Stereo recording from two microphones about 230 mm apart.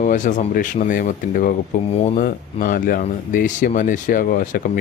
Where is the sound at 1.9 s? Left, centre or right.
Left.